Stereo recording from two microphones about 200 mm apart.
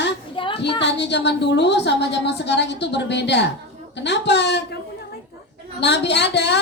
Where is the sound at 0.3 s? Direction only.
25° left (ahead or behind).